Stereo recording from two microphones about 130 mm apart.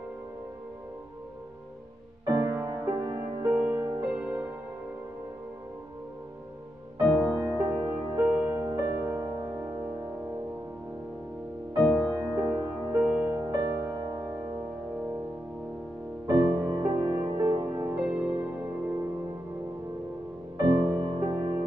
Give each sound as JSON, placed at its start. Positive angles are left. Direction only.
{"t": 2.2, "sound": "music", "side_deg": -20}
{"t": 3.4, "sound": "music", "side_deg": -15}
{"t": 7.0, "sound": "music", "side_deg": -10}
{"t": 11.9, "sound": "music", "side_deg": -10}
{"t": 16.3, "sound": "music", "side_deg": -30}
{"t": 17.9, "sound": "music", "side_deg": -10}
{"t": 20.6, "sound": "music", "side_deg": -30}